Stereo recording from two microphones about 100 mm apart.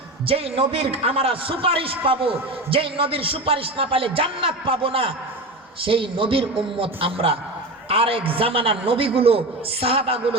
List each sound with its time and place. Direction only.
0.3 s a man's voice: 80° right